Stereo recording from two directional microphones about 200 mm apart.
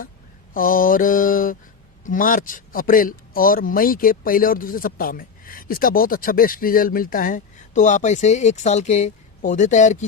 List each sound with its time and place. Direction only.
0.5 s a man's voice: 45° left (ahead or behind)